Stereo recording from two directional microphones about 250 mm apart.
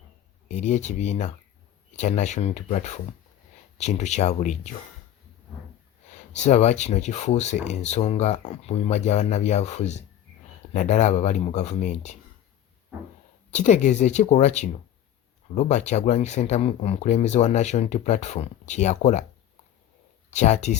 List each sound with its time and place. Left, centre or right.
0.4 s speech: left
6.3 s speech: left
13.5 s speech: left
20.3 s speech: left